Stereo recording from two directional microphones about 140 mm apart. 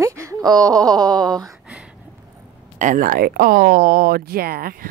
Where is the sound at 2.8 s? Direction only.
70° right (ahead or behind); by 4.8 s 90° right.